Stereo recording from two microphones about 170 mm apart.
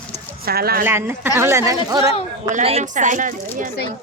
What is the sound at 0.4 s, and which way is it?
Speech, 65° right (ahead or behind).